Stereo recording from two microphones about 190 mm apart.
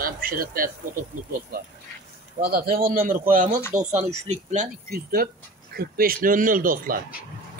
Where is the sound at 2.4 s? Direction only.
50° right (ahead or behind).